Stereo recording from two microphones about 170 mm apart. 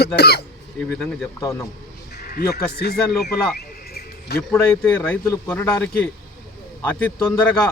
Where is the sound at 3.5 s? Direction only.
65° left (ahead or behind).